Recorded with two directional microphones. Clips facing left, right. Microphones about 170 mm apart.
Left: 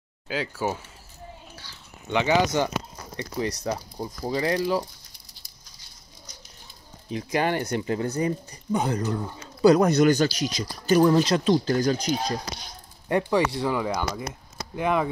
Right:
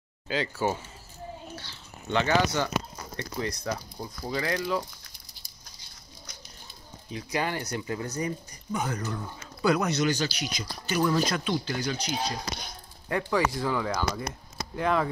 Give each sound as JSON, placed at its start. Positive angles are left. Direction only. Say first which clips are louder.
{"t": 0.3, "sound": "speech", "louder": "even", "side_deg": 5}
{"t": 1.5, "sound": "a sound", "louder": "right 4 dB", "side_deg": 10}
{"t": 3.2, "sound": "speech", "louder": "left 4 dB", "side_deg": 20}
{"t": 7.2, "sound": "speech", "louder": "left 5 dB", "side_deg": 50}
{"t": 7.8, "sound": "speech", "louder": "left 6 dB", "side_deg": 35}
{"t": 9.8, "sound": "speech", "louder": "left 8 dB", "side_deg": 50}
{"t": 13.1, "sound": "speech", "louder": "left 4 dB", "side_deg": 30}
{"t": 13.7, "sound": "speech", "louder": "left 2 dB", "side_deg": 15}